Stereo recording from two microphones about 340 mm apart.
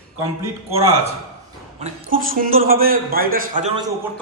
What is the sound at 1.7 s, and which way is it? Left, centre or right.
A man's voice, right.